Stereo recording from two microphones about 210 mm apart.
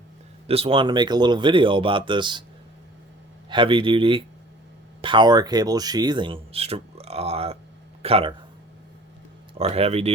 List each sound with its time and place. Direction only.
0.4 s speech: 30° right (ahead or behind)
3.5 s speech: 25° right (ahead or behind)
9.6 s speech: 30° right (ahead or behind)